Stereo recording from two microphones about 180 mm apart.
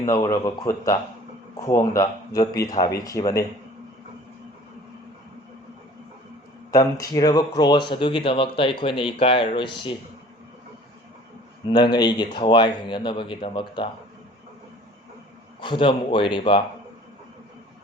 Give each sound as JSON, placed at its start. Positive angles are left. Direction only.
{"t": 0.1, "sound": "a man's voice", "side_deg": 20}
{"t": 6.7, "sound": "speech", "side_deg": 20}
{"t": 11.7, "sound": "speech", "side_deg": 25}
{"t": 15.6, "sound": "speech", "side_deg": 25}